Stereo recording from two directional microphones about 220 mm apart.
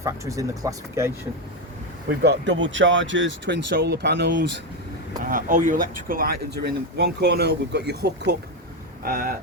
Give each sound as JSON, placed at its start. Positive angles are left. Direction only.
{"t": 0.0, "sound": "speech", "side_deg": -15}
{"t": 2.0, "sound": "speech", "side_deg": -50}
{"t": 5.2, "sound": "speech", "side_deg": -35}